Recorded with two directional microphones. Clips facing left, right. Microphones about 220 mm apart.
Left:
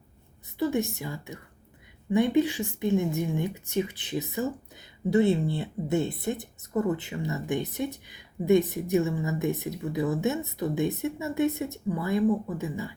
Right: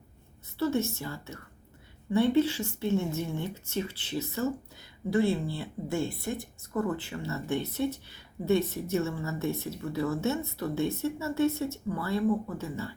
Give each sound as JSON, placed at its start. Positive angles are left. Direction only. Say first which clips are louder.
{"t": 0.6, "sound": "speech", "louder": "left 1 dB", "side_deg": 15}